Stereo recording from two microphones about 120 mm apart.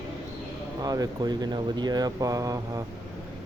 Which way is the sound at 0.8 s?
35° right (ahead or behind).